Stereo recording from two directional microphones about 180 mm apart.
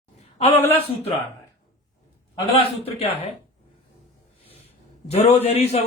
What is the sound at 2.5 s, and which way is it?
Speech, 35° left (ahead or behind).